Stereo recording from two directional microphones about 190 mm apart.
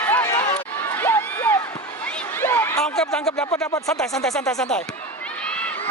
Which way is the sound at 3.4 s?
15° left (ahead or behind).